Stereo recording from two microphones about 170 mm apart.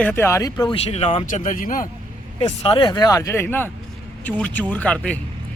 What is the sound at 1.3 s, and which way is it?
Speech, 50° left (ahead or behind).